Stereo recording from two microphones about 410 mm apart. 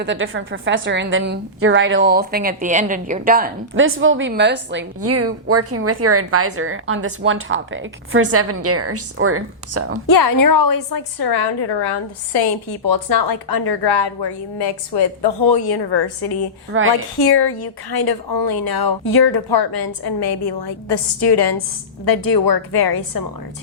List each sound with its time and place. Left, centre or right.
0.0 s a woman's voice: right
10.1 s a woman's voice: left
12.4 s a woman's voice: left
16.7 s a woman's voice: right
17.2 s a woman's voice: left